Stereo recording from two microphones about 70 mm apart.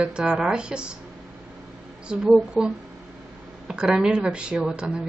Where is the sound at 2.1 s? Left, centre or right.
Centre.